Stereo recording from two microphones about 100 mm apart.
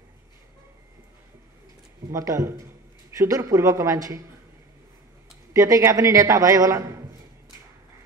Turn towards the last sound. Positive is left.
turn(degrees=-30)  # may be behind; listen again after turning